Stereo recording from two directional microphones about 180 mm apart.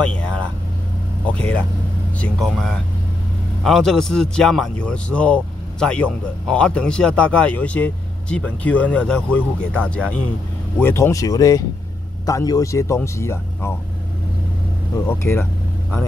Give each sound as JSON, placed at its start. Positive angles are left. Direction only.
{"t": 1.2, "sound": "a man's voice", "side_deg": 5}
{"t": 15.0, "sound": "a man's voice", "side_deg": 15}